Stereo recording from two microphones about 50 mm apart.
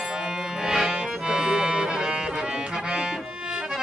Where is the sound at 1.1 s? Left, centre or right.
Centre.